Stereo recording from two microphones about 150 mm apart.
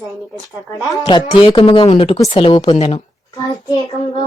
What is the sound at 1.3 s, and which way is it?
Speech, 35° left (ahead or behind).